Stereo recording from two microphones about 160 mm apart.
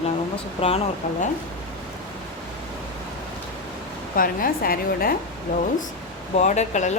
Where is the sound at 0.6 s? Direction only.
35° left (ahead or behind).